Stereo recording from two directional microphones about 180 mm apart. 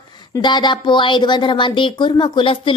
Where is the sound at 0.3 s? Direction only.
25° left (ahead or behind).